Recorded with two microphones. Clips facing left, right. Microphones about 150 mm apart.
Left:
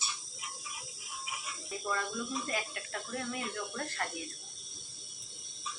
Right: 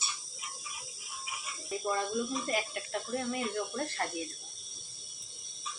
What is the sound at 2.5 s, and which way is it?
Speech, 25° right (ahead or behind).